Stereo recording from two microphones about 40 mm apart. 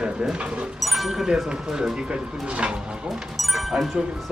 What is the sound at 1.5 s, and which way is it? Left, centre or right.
Speech, centre.